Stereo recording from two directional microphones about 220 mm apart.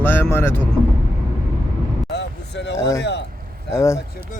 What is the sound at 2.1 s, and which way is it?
Vehicle, 50° left (ahead or behind).